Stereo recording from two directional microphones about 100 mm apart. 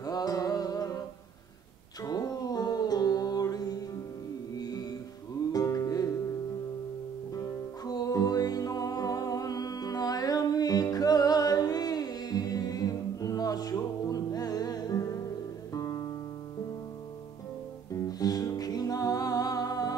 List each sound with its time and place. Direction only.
0.0 s a sound: 40° left (ahead or behind)
2.0 s music: 40° left (ahead or behind)
7.3 s music: 40° left (ahead or behind)
17.9 s music: 40° left (ahead or behind)